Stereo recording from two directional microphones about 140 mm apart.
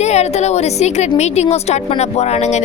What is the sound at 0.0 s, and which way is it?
A woman's voice, 50° left (ahead or behind).